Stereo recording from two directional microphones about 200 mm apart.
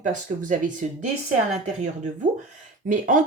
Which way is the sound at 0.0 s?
40° right (ahead or behind).